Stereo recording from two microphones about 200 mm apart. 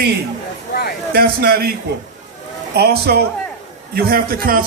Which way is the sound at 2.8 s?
55° right (ahead or behind).